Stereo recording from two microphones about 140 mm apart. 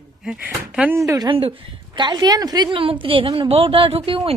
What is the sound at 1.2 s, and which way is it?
A woman's voice, 40° right (ahead or behind).